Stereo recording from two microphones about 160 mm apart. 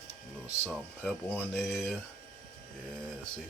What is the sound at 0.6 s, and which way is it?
Speech, 5° left (ahead or behind).